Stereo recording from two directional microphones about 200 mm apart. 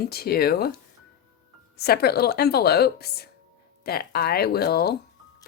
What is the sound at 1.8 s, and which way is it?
Speech, 50° left (ahead or behind).